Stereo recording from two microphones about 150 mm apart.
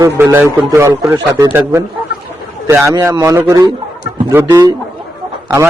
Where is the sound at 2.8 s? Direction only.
25° right (ahead or behind).